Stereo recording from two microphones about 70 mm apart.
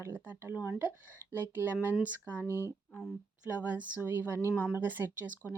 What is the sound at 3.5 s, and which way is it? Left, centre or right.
Speech, right.